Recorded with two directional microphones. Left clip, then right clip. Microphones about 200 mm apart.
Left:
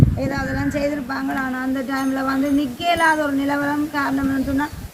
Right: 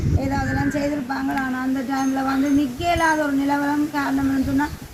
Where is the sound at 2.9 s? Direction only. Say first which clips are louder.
Left 2 dB; 25° left (ahead or behind).